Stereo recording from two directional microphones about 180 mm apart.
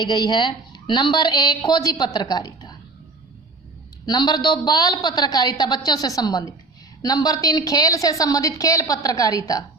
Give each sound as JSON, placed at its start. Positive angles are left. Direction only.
{"t": 0.0, "sound": "a woman's voice", "side_deg": 25}
{"t": 4.0, "sound": "a woman's voice", "side_deg": 20}